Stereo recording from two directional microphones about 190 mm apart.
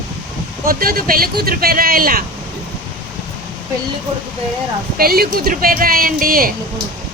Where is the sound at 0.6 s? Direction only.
50° right (ahead or behind).